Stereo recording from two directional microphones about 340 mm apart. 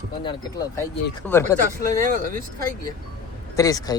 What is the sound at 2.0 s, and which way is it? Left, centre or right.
Speech, right.